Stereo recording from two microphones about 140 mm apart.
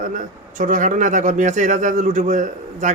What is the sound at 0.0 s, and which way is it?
Speech, 65° right (ahead or behind).